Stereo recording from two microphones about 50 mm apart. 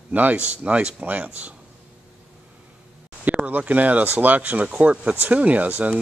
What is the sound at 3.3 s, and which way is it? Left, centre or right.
Speech, right.